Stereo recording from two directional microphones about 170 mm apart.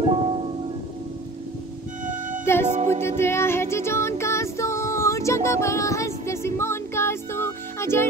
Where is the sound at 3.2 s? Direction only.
15° left (ahead or behind).